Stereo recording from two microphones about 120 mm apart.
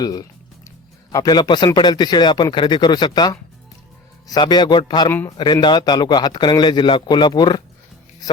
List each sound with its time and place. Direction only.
0.0 s speech: 35° left (ahead or behind)
5.0 s a man's voice: 20° left (ahead or behind)
5.4 s speech: 40° left (ahead or behind)